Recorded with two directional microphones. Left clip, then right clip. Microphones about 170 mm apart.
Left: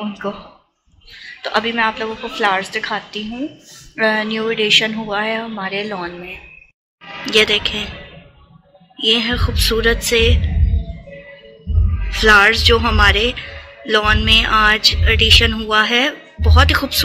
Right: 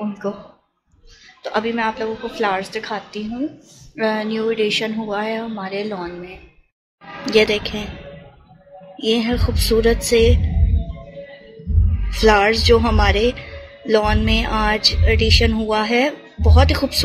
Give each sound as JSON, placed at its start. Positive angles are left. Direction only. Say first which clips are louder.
{"t": 0.2, "sound": "a woman's voice", "louder": "left 1 dB", "side_deg": 0}
{"t": 1.4, "sound": "a woman's voice", "louder": "left 4 dB", "side_deg": 0}
{"t": 7.2, "sound": "speech", "louder": "left 2 dB", "side_deg": -15}
{"t": 8.9, "sound": "music", "louder": "left 4 dB", "side_deg": -15}
{"t": 9.6, "sound": "speech", "louder": "even", "side_deg": -15}
{"t": 12.1, "sound": "a man's voice", "louder": "left 4 dB", "side_deg": -15}